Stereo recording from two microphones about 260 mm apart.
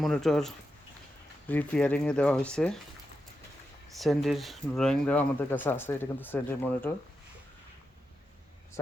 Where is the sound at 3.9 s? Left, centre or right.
Centre.